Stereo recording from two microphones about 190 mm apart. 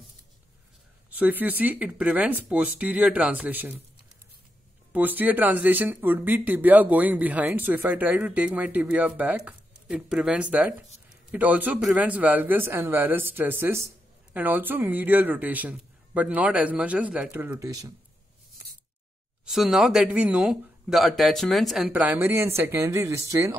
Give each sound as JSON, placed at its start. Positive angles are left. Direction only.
{"t": 1.1, "sound": "speech", "side_deg": -10}
{"t": 4.9, "sound": "speech", "side_deg": -10}
{"t": 19.4, "sound": "speech", "side_deg": 0}